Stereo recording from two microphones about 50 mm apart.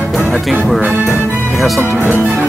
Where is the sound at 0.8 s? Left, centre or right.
Right.